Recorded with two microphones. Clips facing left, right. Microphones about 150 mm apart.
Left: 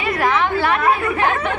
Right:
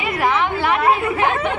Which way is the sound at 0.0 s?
15° right (ahead or behind).